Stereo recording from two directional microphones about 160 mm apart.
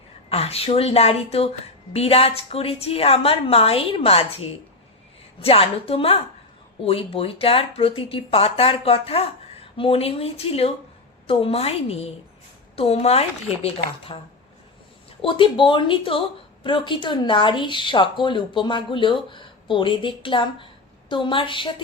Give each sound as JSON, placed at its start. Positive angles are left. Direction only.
{"t": 0.3, "sound": "speech", "side_deg": 40}
{"t": 15.2, "sound": "speech", "side_deg": 30}